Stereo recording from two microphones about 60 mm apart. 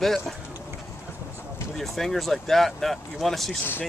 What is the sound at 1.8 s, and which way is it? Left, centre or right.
Speech, centre.